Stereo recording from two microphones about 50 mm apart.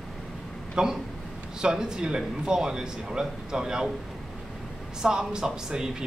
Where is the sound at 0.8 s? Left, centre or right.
Centre.